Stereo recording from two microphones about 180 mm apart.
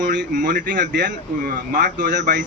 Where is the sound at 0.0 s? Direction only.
80° right.